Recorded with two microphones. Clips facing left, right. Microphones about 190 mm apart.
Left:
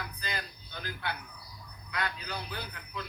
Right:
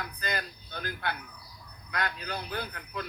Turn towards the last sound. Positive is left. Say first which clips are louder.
# right 5 dB
turn(degrees=-50)  # may be behind; listen again after turning